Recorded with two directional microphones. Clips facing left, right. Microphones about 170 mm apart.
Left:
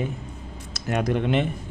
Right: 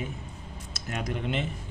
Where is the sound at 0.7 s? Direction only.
70° left (ahead or behind).